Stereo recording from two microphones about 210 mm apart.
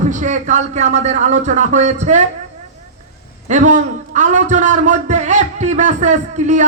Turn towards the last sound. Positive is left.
turn(degrees=-35)  # may be behind; listen again after turning